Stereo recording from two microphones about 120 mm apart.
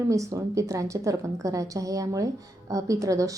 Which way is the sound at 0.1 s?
25° right (ahead or behind).